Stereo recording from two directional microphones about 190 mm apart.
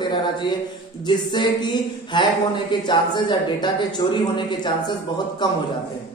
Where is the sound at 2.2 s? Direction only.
25° left (ahead or behind).